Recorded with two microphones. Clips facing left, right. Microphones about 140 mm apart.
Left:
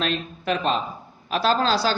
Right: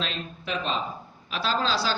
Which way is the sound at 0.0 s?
55° left (ahead or behind).